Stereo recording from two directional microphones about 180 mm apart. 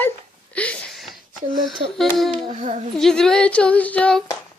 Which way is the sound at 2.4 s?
40° right (ahead or behind).